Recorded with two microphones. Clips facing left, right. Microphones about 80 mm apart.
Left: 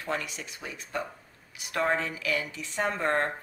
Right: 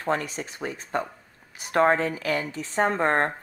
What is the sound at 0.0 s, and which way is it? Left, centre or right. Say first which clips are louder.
Speech: right 6 dB; right.